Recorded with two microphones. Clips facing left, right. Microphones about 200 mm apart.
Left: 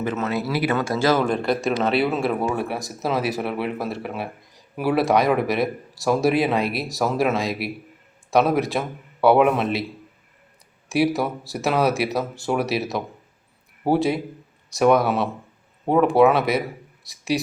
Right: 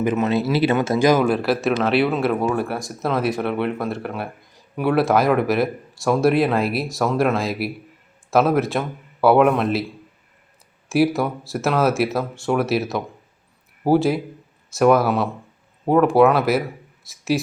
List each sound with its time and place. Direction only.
0.0 s speech: 15° right (ahead or behind)
1.2 s speech: 5° right (ahead or behind)
10.8 s speech: centre (ahead or behind)